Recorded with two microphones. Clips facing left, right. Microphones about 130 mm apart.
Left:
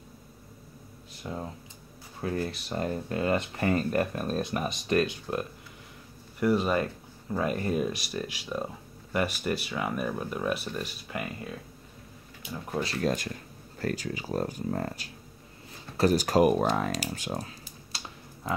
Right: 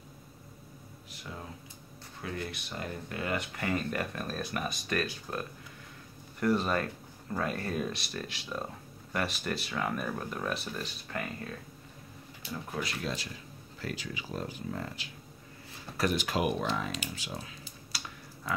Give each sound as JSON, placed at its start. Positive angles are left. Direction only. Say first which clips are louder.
{"t": 2.2, "sound": "speech", "louder": "left 7 dB", "side_deg": 35}
{"t": 6.4, "sound": "speech", "louder": "left 3 dB", "side_deg": 10}
{"t": 12.7, "sound": "speech", "louder": "left 8 dB", "side_deg": 35}
{"t": 17.9, "sound": "typing", "louder": "left 1 dB", "side_deg": 25}